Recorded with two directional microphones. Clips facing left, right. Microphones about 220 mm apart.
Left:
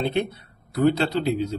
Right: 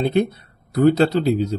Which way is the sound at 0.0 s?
45° right (ahead or behind).